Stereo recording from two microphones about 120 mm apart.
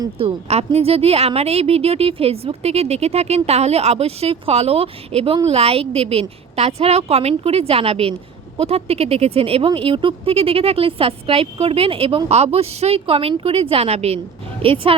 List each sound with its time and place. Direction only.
0.4 s a woman's voice: 60° right (ahead or behind)